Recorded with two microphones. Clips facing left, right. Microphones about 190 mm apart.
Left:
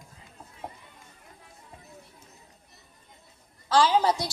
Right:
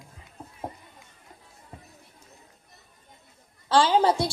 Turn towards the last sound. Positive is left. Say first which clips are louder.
# right 2 dB
turn(degrees=-30)  # may be behind; listen again after turning